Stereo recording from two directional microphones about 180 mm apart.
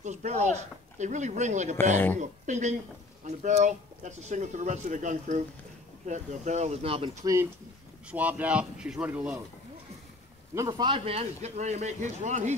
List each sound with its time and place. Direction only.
0.0 s speech: 40° right (ahead or behind)
8.1 s a man's voice: 10° right (ahead or behind)
10.7 s speech: 30° right (ahead or behind)